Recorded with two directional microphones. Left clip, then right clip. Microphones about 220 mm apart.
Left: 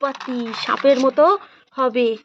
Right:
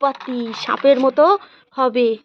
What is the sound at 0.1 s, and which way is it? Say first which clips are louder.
Speech: right 1 dB; centre (ahead or behind).